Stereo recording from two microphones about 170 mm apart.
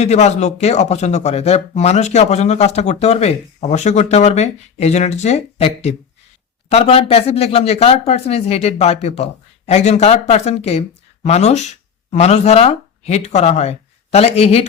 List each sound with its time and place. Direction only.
0.0 s speech: 40° left (ahead or behind)